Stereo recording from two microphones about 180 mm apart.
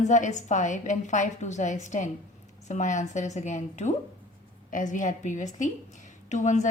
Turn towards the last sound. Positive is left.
turn(degrees=40)  # may be behind; listen again after turning